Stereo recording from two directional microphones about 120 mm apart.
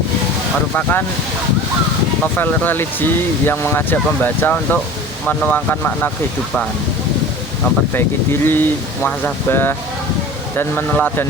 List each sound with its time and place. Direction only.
0.8 s speech: 15° left (ahead or behind)
2.2 s speech: 15° left (ahead or behind)
7.9 s speech: 20° left (ahead or behind)
10.9 s speech: 15° left (ahead or behind)